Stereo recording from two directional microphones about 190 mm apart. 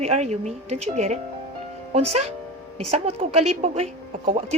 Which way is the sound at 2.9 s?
35° right (ahead or behind).